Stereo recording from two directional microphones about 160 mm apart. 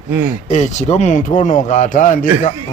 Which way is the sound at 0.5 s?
45° left (ahead or behind).